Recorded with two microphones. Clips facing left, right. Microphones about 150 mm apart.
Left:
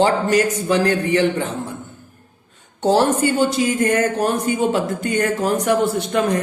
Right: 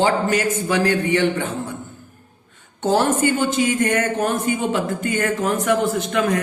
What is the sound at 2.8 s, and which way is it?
A man's voice, 35° left (ahead or behind).